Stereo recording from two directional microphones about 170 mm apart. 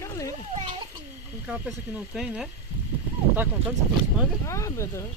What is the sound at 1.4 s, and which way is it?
Speech, 5° right (ahead or behind).